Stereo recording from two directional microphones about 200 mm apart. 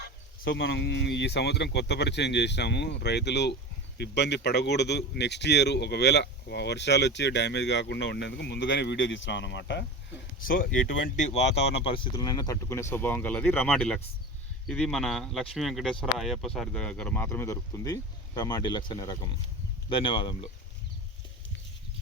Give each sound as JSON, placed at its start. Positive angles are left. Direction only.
{"t": 0.4, "sound": "a man's voice", "side_deg": 55}
{"t": 10.4, "sound": "speech", "side_deg": 45}
{"t": 11.2, "sound": "speech", "side_deg": 35}